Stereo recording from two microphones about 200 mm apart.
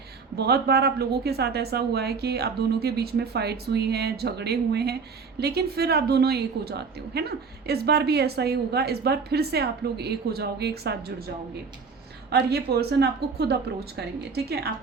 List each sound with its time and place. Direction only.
0.3 s a woman's voice: 55° right (ahead or behind)
12.3 s a woman's voice: 55° right (ahead or behind)